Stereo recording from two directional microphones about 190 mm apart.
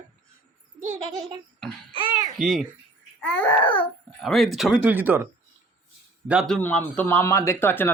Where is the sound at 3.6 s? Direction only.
25° left (ahead or behind).